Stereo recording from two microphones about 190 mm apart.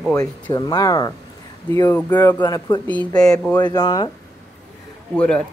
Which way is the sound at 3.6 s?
20° left (ahead or behind).